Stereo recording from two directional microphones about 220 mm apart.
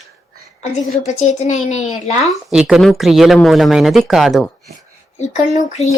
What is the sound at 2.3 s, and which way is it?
Speech, centre (ahead or behind).